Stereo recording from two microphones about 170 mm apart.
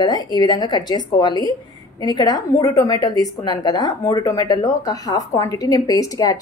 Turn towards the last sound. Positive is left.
turn(degrees=20)  # may be behind; listen again after turning